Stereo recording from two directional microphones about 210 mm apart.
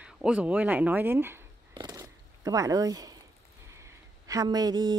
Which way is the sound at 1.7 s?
20° right (ahead or behind).